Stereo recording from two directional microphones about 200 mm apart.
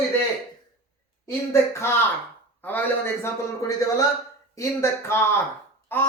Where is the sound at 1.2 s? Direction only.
15° left (ahead or behind).